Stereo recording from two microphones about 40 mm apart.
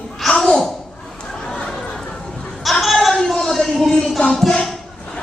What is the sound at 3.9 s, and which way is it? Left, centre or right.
Music, centre.